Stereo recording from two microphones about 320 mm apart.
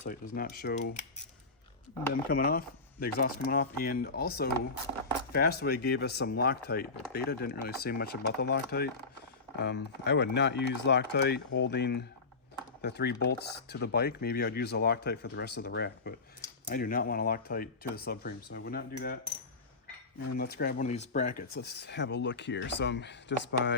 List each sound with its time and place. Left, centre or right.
0.0 s speech: left
2.3 s speech: left
20.3 s speech: left